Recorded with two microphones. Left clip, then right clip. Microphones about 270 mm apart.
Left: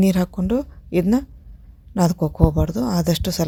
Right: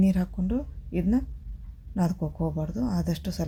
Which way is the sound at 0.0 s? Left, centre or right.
Left.